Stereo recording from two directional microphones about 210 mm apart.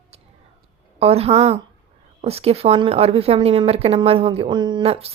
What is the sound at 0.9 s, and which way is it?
A woman's voice, 30° right (ahead or behind).